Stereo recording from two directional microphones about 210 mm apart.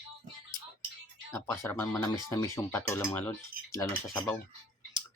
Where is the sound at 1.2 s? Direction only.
15° left (ahead or behind).